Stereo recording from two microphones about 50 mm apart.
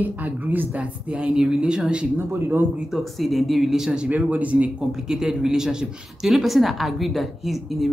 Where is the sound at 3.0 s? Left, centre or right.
Centre.